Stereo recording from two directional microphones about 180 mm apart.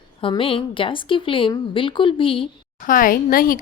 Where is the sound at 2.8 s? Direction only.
50° left (ahead or behind).